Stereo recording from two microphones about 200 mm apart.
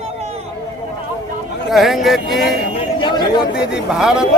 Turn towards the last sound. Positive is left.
turn(degrees=-5)  # may be behind; listen again after turning